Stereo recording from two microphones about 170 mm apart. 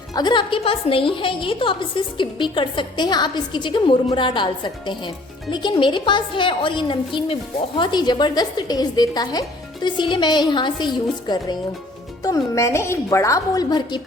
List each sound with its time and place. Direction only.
0.1 s a woman's voice: 25° left (ahead or behind)